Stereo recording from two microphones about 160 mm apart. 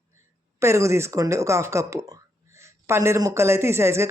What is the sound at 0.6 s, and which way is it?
Speech, 15° right (ahead or behind).